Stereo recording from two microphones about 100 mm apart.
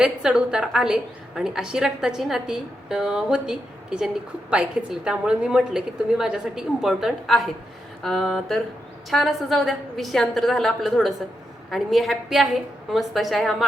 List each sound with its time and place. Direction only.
0.0 s a woman's voice: 5° right (ahead or behind)